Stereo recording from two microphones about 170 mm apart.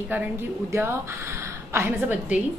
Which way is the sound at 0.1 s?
10° right (ahead or behind).